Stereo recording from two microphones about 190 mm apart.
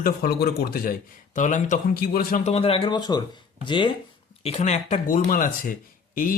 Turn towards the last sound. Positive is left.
turn(degrees=50)  # may be behind; listen again after turning